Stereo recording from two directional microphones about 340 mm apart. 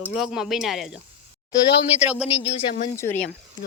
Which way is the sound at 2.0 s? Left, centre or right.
Centre.